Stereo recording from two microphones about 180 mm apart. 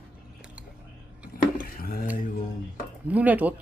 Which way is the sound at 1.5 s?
55° left (ahead or behind).